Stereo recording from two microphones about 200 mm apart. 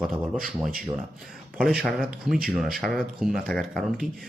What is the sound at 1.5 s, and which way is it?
Speech, 5° right (ahead or behind).